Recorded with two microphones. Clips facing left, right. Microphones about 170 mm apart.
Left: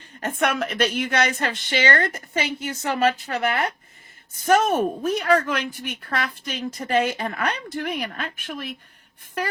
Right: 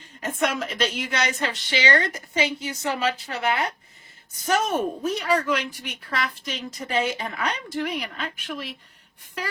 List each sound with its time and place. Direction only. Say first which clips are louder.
0.2 s a woman's voice: left 2 dB; 60° left (ahead or behind)